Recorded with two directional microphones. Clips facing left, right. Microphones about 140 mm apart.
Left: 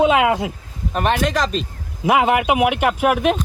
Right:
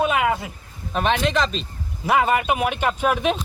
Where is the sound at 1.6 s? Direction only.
15° left (ahead or behind).